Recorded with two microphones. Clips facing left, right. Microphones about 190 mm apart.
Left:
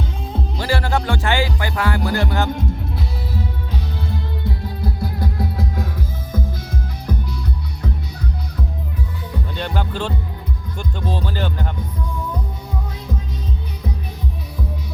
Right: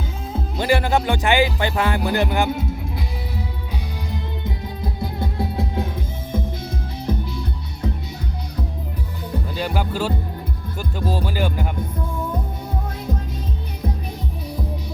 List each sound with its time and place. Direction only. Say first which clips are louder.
0.6 s music: right 3 dB; 20° right (ahead or behind)
2.0 s speech: right 1 dB; 15° right (ahead or behind)
4.1 s music: left 1 dB; 20° right (ahead or behind)
7.1 s music: right 1 dB; 25° right (ahead or behind)
9.6 s speech: right 1 dB; 5° right (ahead or behind)